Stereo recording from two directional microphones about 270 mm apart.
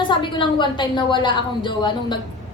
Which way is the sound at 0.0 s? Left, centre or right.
Centre.